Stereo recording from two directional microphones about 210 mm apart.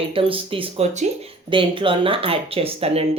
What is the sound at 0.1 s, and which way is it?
Speech, 25° right (ahead or behind).